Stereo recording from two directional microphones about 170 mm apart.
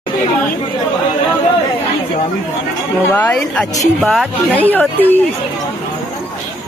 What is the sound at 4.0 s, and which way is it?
Speech, centre (ahead or behind).